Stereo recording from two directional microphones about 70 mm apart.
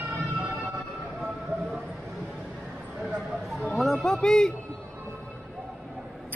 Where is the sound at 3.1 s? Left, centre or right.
Centre.